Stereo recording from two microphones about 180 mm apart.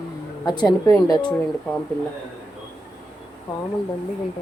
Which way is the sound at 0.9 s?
20° left (ahead or behind).